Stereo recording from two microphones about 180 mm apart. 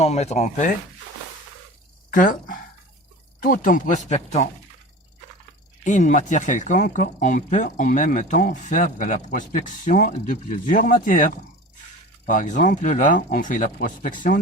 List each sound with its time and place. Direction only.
0.0 s speech: 40° left (ahead or behind)
2.0 s speech: 50° left (ahead or behind)
5.8 s speech: 40° left (ahead or behind)
12.3 s speech: 45° left (ahead or behind)